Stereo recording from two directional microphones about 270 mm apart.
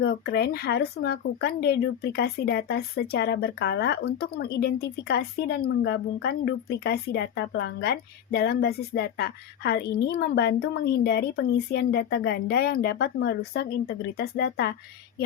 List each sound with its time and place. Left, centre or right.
0.0 s speech: left